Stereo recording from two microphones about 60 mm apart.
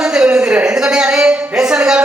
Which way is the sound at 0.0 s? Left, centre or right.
Centre.